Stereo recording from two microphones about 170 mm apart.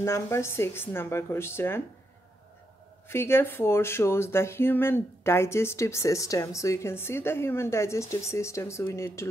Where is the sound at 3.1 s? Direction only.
15° left (ahead or behind).